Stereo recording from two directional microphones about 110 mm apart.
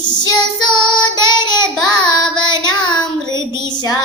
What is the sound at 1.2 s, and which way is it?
Child singing, 40° left (ahead or behind).